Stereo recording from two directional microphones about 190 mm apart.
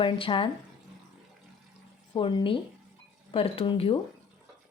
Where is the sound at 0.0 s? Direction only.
25° left (ahead or behind).